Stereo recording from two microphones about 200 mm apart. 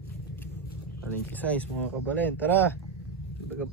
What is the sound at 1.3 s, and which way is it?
Speech, 5° left (ahead or behind).